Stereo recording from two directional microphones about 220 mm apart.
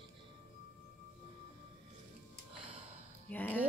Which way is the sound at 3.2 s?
5° left (ahead or behind).